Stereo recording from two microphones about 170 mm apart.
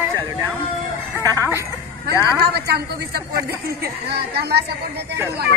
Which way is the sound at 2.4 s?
70° right (ahead or behind).